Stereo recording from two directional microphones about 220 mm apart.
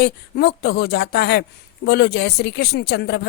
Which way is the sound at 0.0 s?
50° left (ahead or behind).